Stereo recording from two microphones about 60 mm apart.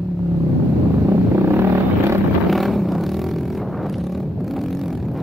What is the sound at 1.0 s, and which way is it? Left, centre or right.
Vehicle, right.